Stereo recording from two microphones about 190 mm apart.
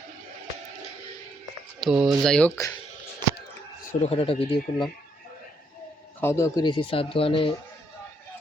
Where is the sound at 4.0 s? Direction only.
30° left (ahead or behind).